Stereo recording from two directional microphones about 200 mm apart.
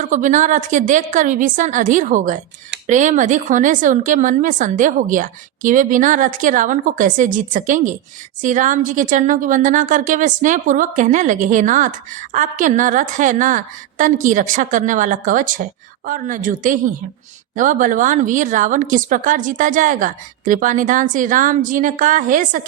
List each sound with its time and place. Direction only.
0.0 s a woman's voice: 40° right (ahead or behind)